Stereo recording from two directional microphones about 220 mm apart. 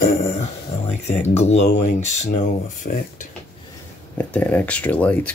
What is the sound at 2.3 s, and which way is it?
Speech, 35° left (ahead or behind).